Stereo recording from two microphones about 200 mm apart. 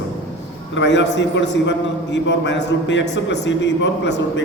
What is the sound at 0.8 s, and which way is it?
A man's voice, 65° left (ahead or behind).